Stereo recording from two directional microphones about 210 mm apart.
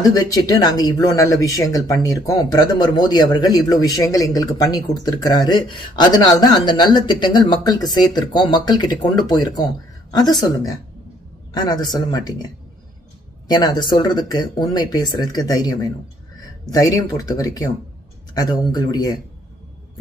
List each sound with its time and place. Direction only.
0.0 s speech: 15° left (ahead or behind)
13.5 s speech: 20° left (ahead or behind)